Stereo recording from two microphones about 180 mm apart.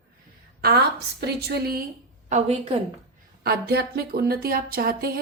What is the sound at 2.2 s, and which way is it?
Speech, 40° right (ahead or behind).